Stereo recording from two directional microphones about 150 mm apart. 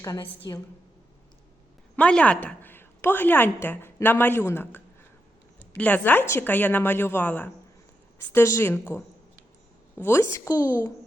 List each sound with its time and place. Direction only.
0.0 s a woman's voice: 25° left (ahead or behind)
2.0 s a woman's voice: 10° left (ahead or behind)